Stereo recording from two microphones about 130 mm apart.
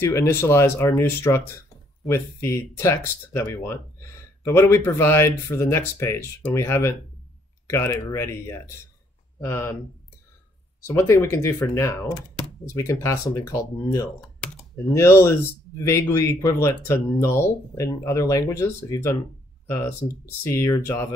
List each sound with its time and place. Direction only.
0.0 s speech: 20° left (ahead or behind)
10.8 s speech: 20° left (ahead or behind)
14.9 s speech: 20° left (ahead or behind)